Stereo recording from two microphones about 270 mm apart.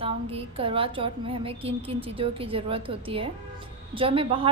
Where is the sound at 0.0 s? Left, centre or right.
Right.